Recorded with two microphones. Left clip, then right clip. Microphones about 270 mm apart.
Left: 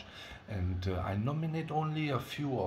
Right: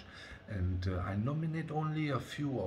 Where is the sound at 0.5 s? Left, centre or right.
Centre.